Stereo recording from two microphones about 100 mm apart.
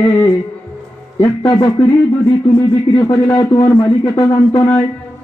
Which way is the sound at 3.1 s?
35° left (ahead or behind).